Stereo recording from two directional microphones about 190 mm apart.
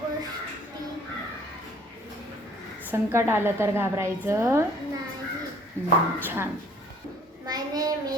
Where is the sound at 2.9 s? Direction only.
10° right (ahead or behind).